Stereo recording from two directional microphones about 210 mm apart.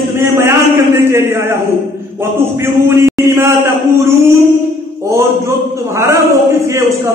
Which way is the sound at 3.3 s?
15° right (ahead or behind).